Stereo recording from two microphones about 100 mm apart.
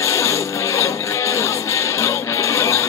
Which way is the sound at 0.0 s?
30° left (ahead or behind).